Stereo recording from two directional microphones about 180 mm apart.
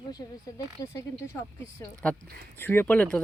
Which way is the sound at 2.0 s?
5° left (ahead or behind).